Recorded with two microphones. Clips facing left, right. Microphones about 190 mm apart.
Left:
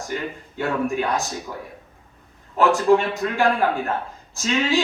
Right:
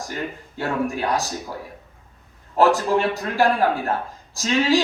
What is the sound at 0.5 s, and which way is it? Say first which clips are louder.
Speech: left 2 dB; 35° right (ahead or behind).